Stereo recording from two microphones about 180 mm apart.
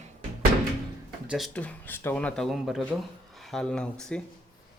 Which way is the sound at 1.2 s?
Centre (ahead or behind).